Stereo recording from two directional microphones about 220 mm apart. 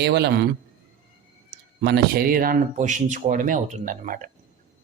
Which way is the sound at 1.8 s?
45° right (ahead or behind).